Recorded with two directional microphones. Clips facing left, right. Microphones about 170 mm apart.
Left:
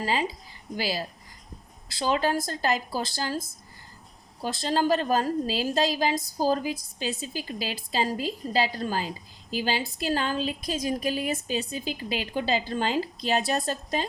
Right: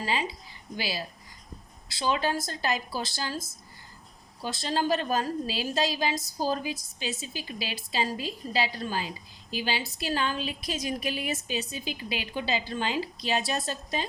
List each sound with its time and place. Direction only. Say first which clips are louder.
0.0 s a woman's voice: left 3 dB; 40° left (ahead or behind)
4.4 s a woman's voice: left 3 dB; 45° left (ahead or behind)